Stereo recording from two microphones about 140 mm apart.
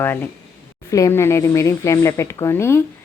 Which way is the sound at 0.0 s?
15° left (ahead or behind).